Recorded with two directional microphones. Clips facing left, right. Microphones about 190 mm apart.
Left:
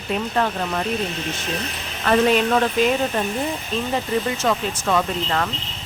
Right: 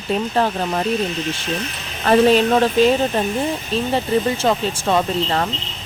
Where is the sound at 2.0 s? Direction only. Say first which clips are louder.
Right 4 dB; 30° right (ahead or behind).